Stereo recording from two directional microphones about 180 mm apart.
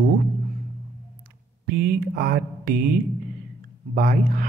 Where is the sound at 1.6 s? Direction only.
55° right (ahead or behind).